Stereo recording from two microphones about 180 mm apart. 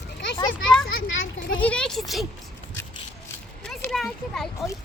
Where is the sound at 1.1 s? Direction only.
90° left.